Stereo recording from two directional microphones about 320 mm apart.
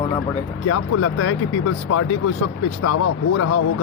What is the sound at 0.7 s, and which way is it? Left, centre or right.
Speech, left.